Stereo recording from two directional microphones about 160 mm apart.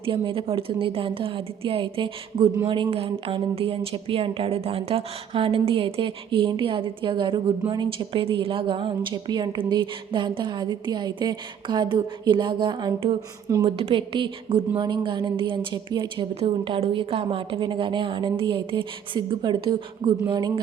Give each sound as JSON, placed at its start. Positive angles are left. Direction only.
{"t": 0.0, "sound": "a woman's voice", "side_deg": -35}